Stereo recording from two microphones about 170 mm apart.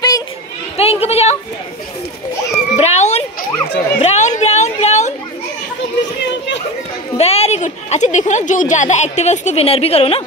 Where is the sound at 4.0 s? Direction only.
40° left (ahead or behind).